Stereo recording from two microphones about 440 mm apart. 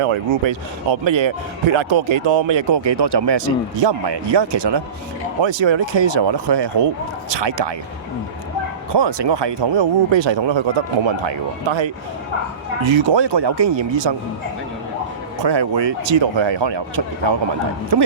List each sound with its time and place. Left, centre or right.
0.1 s speech: right
5.4 s speech: right
8.9 s speech: right
15.4 s a woman's voice: right